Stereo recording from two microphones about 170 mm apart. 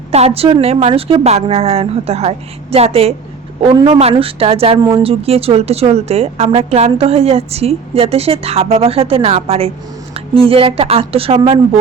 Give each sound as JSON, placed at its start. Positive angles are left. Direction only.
{"t": 0.1, "sound": "speech", "side_deg": -35}